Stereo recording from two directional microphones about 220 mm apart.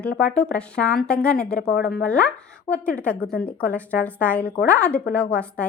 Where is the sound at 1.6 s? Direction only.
50° left (ahead or behind).